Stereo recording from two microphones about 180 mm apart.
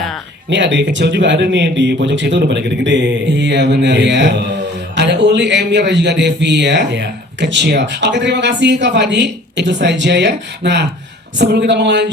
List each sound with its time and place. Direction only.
0.5 s a man's voice: 75° right (ahead or behind)